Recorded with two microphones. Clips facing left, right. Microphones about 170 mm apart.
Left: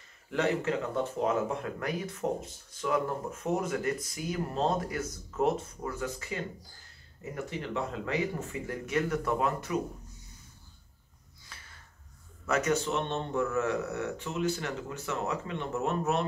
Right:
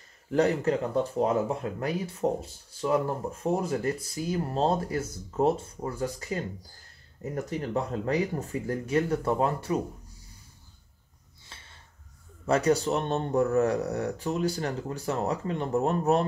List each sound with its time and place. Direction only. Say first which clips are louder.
0.3 s speech: right 5 dB; 35° right (ahead or behind)
11.4 s a sound: right 1 dB; 25° right (ahead or behind)
12.4 s speech: right 5 dB; 35° right (ahead or behind)